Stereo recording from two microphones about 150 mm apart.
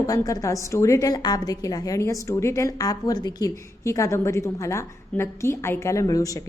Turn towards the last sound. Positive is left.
turn(degrees=20)  # may be behind; listen again after turning